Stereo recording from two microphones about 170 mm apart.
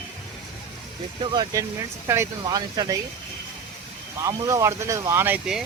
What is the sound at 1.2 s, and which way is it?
Speech, 25° right (ahead or behind).